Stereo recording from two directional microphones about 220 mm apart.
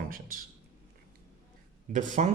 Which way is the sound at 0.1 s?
40° right (ahead or behind).